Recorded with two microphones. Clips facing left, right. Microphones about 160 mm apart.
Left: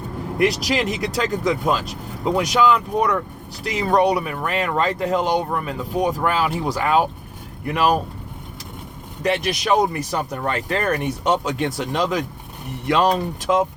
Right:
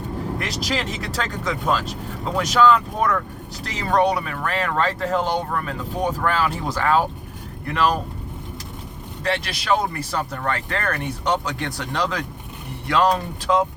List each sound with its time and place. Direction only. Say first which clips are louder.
0.3 s speech: left 10 dB; 15° left (ahead or behind)
9.2 s speech: left 4 dB; 20° left (ahead or behind)